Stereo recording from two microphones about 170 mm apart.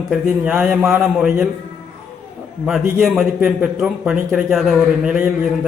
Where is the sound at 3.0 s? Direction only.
5° right (ahead or behind).